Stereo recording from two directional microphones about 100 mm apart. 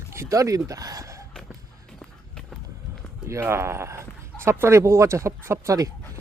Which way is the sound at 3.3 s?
25° right (ahead or behind).